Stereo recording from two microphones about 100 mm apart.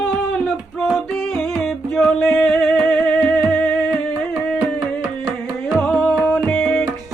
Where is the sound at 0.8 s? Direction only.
Centre (ahead or behind).